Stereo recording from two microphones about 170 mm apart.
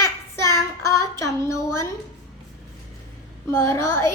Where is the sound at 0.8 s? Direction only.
20° left (ahead or behind).